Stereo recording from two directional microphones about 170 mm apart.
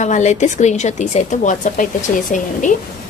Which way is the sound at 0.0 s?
45° left (ahead or behind).